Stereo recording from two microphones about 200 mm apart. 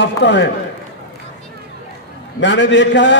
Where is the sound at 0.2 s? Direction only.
65° left (ahead or behind).